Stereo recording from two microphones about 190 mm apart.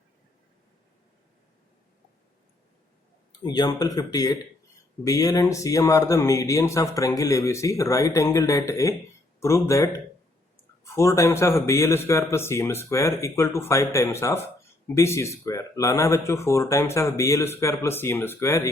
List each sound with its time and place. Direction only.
3.4 s speech: 20° left (ahead or behind)